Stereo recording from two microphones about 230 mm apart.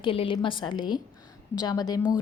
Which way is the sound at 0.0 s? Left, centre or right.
Left.